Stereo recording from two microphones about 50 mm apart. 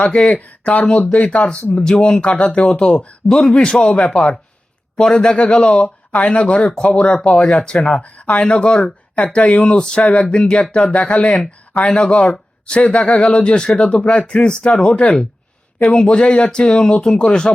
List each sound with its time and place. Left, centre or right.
0.0 s speech: centre
1.7 s speech: centre
14.0 s speech: left